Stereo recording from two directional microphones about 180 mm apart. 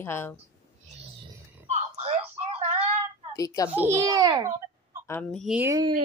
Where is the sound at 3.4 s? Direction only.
20° left (ahead or behind).